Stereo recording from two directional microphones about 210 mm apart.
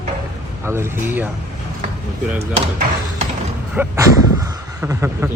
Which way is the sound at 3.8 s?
10° right (ahead or behind).